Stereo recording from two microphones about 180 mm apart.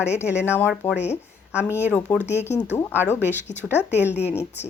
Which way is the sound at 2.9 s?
10° right (ahead or behind).